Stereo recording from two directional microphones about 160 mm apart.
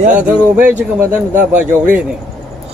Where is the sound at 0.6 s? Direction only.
10° right (ahead or behind).